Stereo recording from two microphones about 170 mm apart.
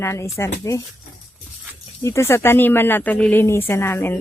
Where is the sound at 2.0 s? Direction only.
15° left (ahead or behind).